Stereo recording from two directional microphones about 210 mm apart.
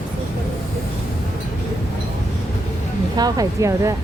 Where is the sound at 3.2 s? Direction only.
15° right (ahead or behind).